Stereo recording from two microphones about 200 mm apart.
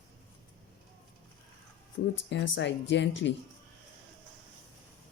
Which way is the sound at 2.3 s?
65° left (ahead or behind).